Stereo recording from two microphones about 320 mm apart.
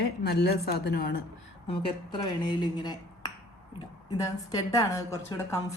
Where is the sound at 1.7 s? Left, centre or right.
Centre.